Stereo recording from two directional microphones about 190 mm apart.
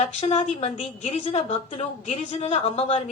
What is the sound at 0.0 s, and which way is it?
A woman's voice, 30° left (ahead or behind).